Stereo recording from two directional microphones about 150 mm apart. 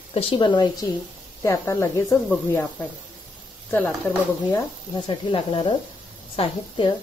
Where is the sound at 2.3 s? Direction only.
10° left (ahead or behind).